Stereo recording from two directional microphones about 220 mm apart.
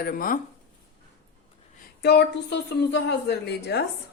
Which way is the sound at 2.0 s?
50° left (ahead or behind).